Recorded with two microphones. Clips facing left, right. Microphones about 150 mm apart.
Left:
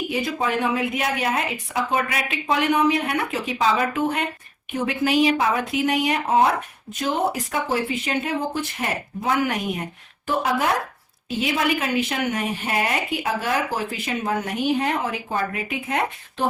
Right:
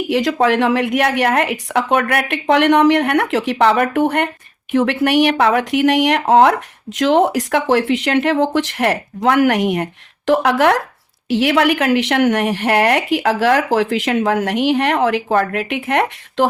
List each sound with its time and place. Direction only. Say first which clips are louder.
0.1 s a woman's voice: right 12 dB; 85° right; by 4.3 s 70° right (ahead or behind)
4.7 s speech: right 7 dB; 80° right